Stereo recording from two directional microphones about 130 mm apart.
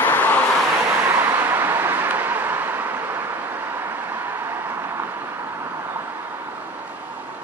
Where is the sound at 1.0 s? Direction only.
15° right (ahead or behind).